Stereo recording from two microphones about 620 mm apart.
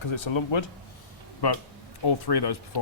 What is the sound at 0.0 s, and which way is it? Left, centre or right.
A man's voice, left.